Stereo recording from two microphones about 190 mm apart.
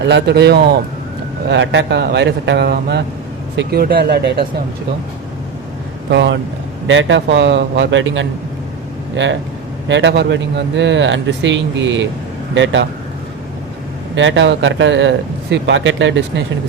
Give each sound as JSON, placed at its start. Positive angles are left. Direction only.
{"t": 0.0, "sound": "speech", "side_deg": -65}
{"t": 1.5, "sound": "speech", "side_deg": -70}
{"t": 6.1, "sound": "speech", "side_deg": -65}
{"t": 6.8, "sound": "speech", "side_deg": -75}
{"t": 14.2, "sound": "speech", "side_deg": -75}